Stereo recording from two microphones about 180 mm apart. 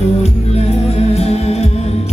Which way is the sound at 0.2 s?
35° left (ahead or behind).